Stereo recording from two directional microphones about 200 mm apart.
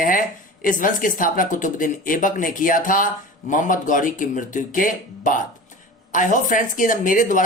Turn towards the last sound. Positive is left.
turn(degrees=40)  # may be behind; listen again after turning